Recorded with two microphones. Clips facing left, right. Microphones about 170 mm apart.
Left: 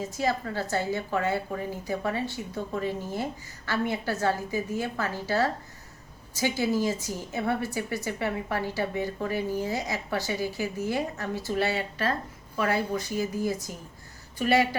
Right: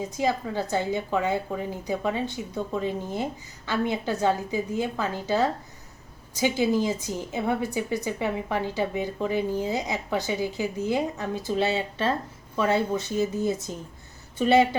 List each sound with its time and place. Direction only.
0.0 s a woman's voice: 15° right (ahead or behind)